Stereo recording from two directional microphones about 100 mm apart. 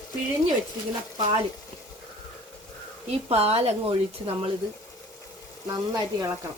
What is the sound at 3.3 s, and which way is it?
A woman's voice, 90° right.